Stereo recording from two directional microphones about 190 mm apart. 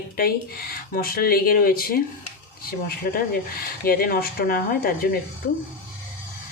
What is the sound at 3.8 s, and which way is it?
Speech, 50° left (ahead or behind).